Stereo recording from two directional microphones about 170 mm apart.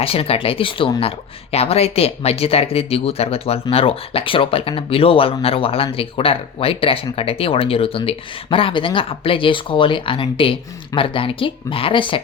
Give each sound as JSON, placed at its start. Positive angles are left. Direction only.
{"t": 0.0, "sound": "speech", "side_deg": 35}